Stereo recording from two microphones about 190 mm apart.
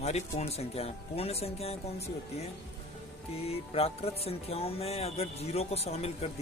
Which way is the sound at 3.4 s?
30° left (ahead or behind).